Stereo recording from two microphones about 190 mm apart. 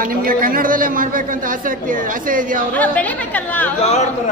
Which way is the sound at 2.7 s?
10° left (ahead or behind).